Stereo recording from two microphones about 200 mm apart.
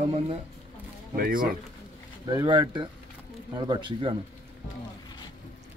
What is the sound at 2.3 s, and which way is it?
Speech, 20° right (ahead or behind).